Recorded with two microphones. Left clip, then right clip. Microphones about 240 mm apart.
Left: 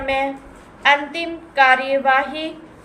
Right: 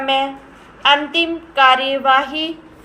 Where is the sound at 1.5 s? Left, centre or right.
Centre.